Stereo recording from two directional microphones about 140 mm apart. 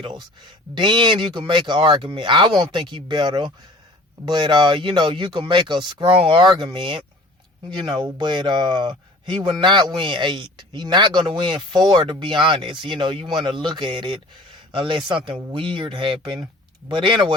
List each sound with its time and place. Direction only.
0.7 s a man's voice: 35° right (ahead or behind)
8.2 s a man's voice: 35° right (ahead or behind)